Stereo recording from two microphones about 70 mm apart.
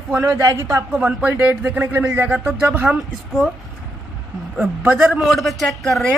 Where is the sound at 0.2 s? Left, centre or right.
Right.